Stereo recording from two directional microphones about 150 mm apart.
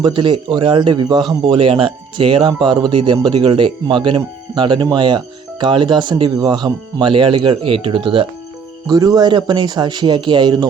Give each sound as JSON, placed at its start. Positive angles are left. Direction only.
{"t": 0.0, "sound": "a man's voice", "side_deg": -30}
{"t": 8.9, "sound": "speech", "side_deg": -25}